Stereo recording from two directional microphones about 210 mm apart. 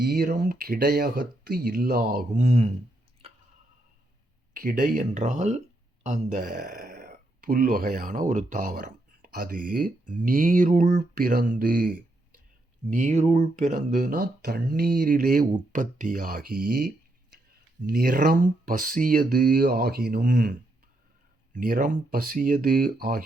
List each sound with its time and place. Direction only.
0.0 s speech: 50° right (ahead or behind)
4.5 s speech: 40° right (ahead or behind)